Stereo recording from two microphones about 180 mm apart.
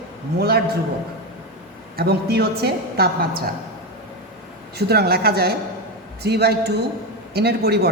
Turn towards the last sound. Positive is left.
turn(degrees=-65)  # may be behind; listen again after turning